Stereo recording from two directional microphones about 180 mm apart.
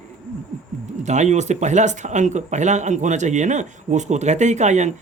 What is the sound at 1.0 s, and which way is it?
Speech, 40° right (ahead or behind).